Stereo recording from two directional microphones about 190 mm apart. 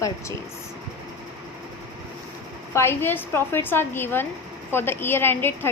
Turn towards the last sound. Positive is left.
turn(degrees=10)  # may be behind; listen again after turning